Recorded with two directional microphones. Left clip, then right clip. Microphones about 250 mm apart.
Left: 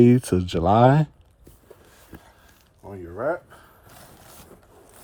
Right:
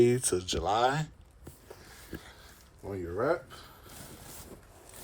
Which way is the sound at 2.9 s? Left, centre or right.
Centre.